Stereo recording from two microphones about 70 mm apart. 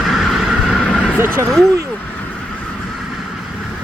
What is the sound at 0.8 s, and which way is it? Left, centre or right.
Vehicle, centre.